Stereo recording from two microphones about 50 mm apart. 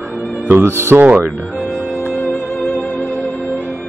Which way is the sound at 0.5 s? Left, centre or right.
Right.